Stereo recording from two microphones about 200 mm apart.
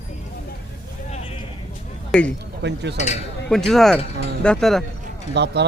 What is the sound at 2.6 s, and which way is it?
Speech, 60° right (ahead or behind).